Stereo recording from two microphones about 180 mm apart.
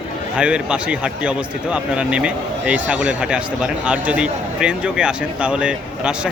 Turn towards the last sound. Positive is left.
turn(degrees=-5)  # may be behind; listen again after turning